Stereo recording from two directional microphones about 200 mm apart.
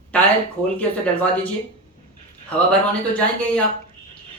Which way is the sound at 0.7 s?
5° left (ahead or behind).